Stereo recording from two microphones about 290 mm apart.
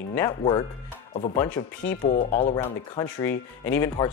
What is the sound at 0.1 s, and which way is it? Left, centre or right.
Speech, centre.